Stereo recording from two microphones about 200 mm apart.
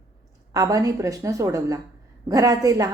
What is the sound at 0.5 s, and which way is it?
A woman's voice, 15° right (ahead or behind).